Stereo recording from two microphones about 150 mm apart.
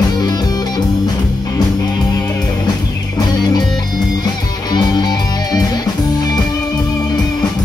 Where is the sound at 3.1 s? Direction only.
25° left (ahead or behind).